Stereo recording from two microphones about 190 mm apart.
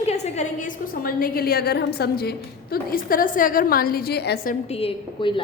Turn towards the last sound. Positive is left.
turn(degrees=30)  # may be behind; listen again after turning